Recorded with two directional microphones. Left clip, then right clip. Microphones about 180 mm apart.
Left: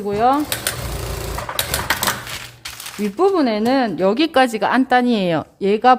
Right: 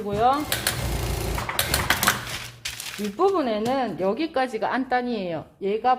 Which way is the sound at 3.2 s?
55° left (ahead or behind).